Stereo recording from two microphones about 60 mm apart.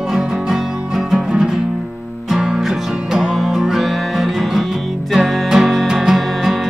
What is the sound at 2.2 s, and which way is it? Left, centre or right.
Music, centre.